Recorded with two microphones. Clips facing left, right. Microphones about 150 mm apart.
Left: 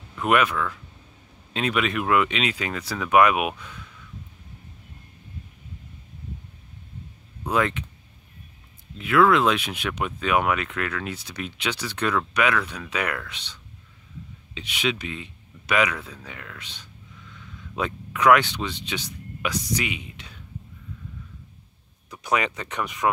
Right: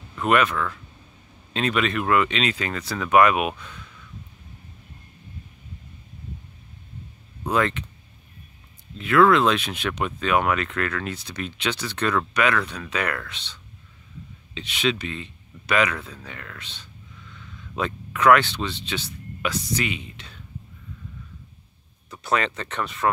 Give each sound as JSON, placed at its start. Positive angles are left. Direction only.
{"t": 0.1, "sound": "speech", "side_deg": 10}
{"t": 7.4, "sound": "speech", "side_deg": 10}
{"t": 8.9, "sound": "speech", "side_deg": 10}
{"t": 22.1, "sound": "speech", "side_deg": 10}